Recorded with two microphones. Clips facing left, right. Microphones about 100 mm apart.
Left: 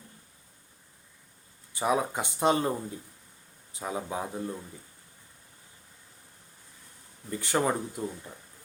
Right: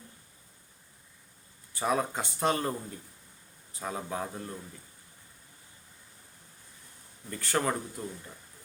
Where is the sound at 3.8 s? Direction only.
15° left (ahead or behind).